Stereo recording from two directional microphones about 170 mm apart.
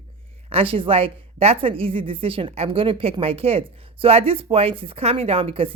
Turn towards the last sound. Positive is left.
turn(degrees=-35)  # may be behind; listen again after turning